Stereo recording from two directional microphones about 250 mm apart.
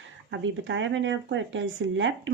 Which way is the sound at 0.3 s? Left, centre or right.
Right.